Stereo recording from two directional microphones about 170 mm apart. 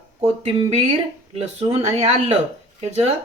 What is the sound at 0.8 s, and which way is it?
Speech, 40° right (ahead or behind).